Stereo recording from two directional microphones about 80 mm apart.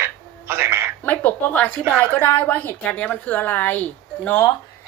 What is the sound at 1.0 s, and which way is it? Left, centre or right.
A woman's voice, left.